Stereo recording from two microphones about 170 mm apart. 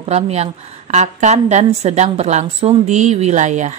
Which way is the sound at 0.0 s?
40° right (ahead or behind).